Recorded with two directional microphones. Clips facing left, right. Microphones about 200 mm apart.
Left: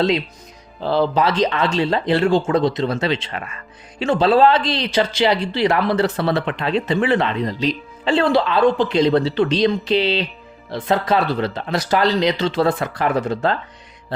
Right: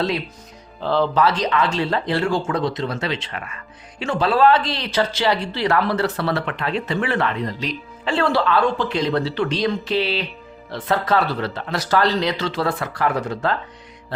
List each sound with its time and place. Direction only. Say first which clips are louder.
0.8 s speech: left 1 dB; 10° left (ahead or behind)